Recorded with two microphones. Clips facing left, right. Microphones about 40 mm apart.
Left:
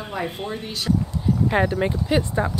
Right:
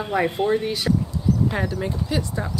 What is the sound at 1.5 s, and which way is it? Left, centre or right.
Speech, left.